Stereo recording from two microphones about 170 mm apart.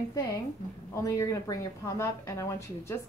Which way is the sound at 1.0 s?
20° left (ahead or behind).